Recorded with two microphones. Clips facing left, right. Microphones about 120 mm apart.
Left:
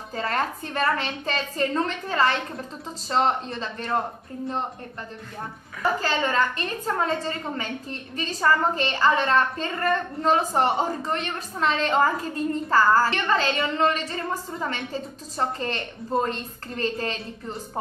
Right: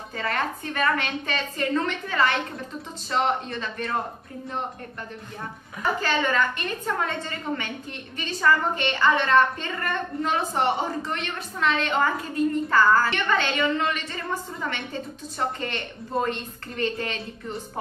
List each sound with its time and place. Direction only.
0.1 s a woman's voice: 35° left (ahead or behind)
5.9 s a woman's voice: 35° left (ahead or behind)